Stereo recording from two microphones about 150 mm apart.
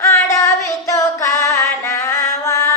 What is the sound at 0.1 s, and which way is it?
Music, 20° left (ahead or behind).